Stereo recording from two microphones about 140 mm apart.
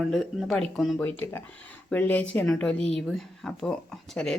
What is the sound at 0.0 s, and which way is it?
Speech, centre (ahead or behind).